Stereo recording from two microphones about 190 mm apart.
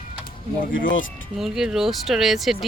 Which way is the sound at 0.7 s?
85° left.